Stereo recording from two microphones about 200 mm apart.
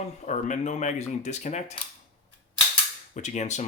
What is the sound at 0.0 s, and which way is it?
Speech, 35° left (ahead or behind).